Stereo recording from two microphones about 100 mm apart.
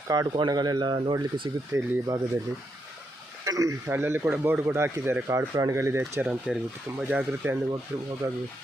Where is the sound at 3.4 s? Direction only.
35° right (ahead or behind).